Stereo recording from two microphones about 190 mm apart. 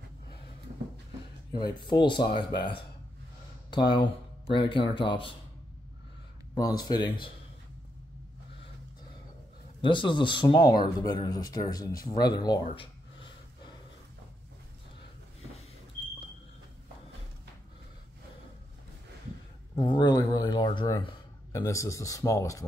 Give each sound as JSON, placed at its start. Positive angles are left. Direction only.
{"t": 1.9, "sound": "speech", "side_deg": 25}
{"t": 3.9, "sound": "speech", "side_deg": 25}
{"t": 6.5, "sound": "speech", "side_deg": 20}
{"t": 9.8, "sound": "speech", "side_deg": 25}
{"t": 19.7, "sound": "speech", "side_deg": 25}